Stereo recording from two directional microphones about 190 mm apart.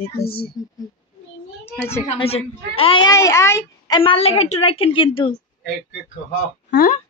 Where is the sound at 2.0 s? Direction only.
30° left (ahead or behind); by 4.0 s 15° left (ahead or behind).